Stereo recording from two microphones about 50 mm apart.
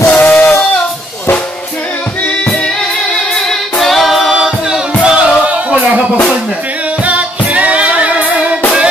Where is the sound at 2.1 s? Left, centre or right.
Left.